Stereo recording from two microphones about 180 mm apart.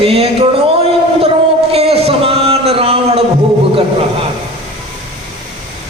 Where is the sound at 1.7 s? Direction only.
35° right (ahead or behind).